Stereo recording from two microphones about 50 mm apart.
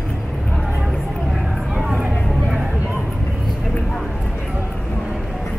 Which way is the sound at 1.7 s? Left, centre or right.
Centre.